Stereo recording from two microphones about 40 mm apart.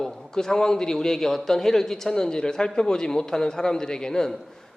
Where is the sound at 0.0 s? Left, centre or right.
Centre.